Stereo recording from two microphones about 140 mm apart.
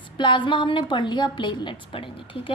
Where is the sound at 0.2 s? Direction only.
35° left (ahead or behind).